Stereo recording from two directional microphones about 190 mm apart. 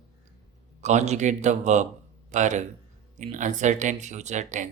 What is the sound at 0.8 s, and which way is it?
A man's voice, 35° right (ahead or behind).